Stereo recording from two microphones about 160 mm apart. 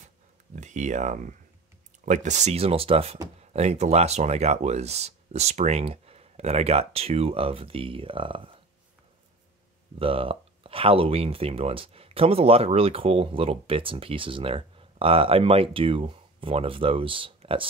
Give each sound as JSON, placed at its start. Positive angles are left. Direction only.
{"t": 0.6, "sound": "speech", "side_deg": -50}
{"t": 9.9, "sound": "speech", "side_deg": -35}